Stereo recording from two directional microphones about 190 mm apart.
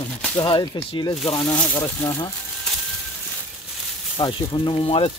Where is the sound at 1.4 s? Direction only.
5° left (ahead or behind).